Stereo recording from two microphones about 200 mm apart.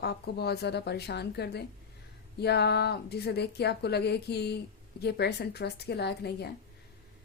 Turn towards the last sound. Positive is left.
turn(degrees=55)  # may be behind; listen again after turning